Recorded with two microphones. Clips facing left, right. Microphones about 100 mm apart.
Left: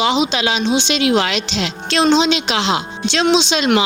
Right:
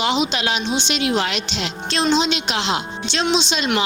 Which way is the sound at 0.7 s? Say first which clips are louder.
Left 6 dB; 90° left.